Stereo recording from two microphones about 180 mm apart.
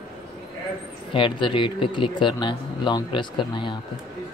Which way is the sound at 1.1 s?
30° left (ahead or behind).